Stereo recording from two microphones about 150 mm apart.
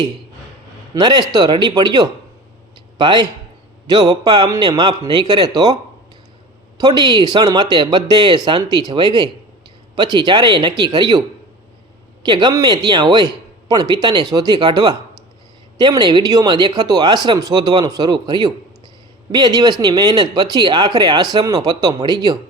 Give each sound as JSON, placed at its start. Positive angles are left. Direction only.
{"t": 0.9, "sound": "speech", "side_deg": -30}
{"t": 6.7, "sound": "speech", "side_deg": -25}
{"t": 12.2, "sound": "speech", "side_deg": -30}